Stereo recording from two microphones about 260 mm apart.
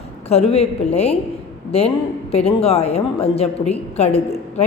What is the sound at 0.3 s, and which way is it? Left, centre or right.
A woman's voice, left.